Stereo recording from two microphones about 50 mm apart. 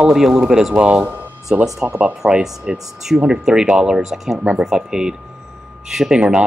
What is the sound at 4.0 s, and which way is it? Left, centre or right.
Speech, centre.